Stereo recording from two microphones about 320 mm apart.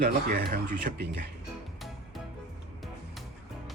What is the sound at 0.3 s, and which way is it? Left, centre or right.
Speech, right.